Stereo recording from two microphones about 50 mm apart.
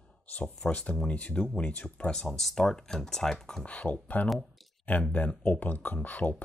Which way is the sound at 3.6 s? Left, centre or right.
Left.